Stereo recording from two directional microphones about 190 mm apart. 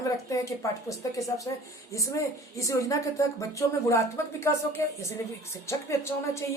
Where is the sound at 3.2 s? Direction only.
15° left (ahead or behind).